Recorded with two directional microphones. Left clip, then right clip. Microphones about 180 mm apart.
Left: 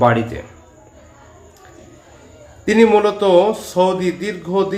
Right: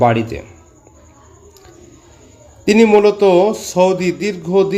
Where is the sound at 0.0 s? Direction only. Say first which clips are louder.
Right 1 dB; 30° right (ahead or behind).